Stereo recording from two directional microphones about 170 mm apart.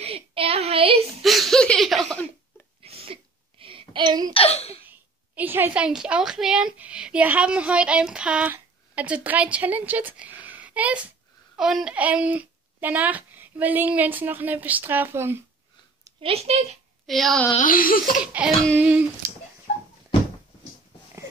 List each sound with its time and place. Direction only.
0.0 s child singing: 35° right (ahead or behind)
1.2 s a sound: centre (ahead or behind)
2.8 s a sound: 35° right (ahead or behind)
4.3 s speech: 35° left (ahead or behind)
4.8 s a woman's voice: 10° right (ahead or behind)
16.2 s speech: 35° right (ahead or behind)
17.0 s speech: centre (ahead or behind)
17.6 s laughter: 55° left (ahead or behind)
18.2 s speech: 5° right (ahead or behind)